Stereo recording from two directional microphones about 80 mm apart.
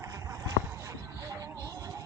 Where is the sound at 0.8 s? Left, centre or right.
Right.